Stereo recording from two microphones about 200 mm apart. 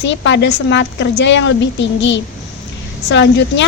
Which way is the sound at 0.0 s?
65° left (ahead or behind).